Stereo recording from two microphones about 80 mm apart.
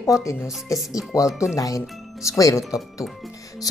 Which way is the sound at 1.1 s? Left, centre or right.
Left.